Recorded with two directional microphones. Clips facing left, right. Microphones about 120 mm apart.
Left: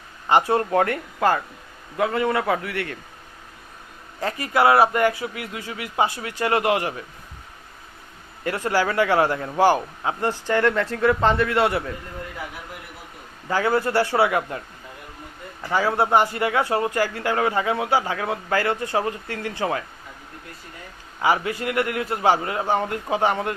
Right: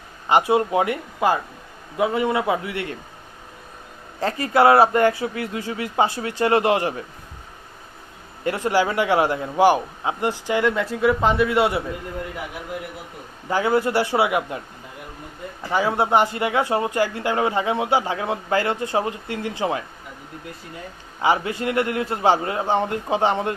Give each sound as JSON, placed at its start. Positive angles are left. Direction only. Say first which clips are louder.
{"t": 0.3, "sound": "speech", "louder": "right 1 dB", "side_deg": -15}
{"t": 4.2, "sound": "speech", "louder": "right 3 dB", "side_deg": -30}
{"t": 8.4, "sound": "speech", "louder": "right 2 dB", "side_deg": -20}
{"t": 13.5, "sound": "speech", "louder": "right 1 dB", "side_deg": -20}
{"t": 15.6, "sound": "speech", "louder": "even", "side_deg": -20}
{"t": 21.2, "sound": "speech", "louder": "right 1 dB", "side_deg": -25}